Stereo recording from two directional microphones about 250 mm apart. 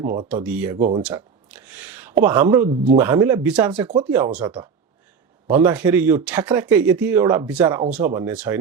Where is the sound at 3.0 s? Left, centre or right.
Centre.